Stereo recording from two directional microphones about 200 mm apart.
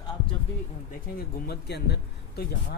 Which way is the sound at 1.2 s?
50° left (ahead or behind).